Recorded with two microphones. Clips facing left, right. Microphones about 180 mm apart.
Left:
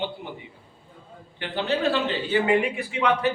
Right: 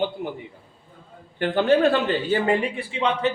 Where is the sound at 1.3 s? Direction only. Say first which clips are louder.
Right 8 dB; 50° right (ahead or behind).